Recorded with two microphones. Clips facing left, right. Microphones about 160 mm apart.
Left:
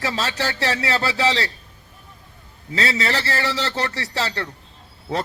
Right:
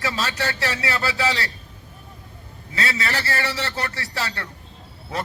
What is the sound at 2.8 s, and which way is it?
A man's voice, 25° left (ahead or behind).